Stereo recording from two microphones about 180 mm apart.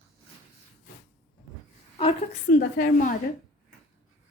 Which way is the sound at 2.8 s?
45° left (ahead or behind).